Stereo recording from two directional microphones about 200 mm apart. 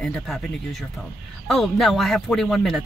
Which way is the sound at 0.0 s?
Centre (ahead or behind).